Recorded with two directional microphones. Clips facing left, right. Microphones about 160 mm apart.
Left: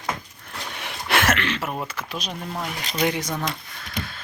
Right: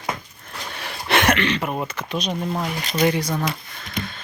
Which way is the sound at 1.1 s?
5° left (ahead or behind).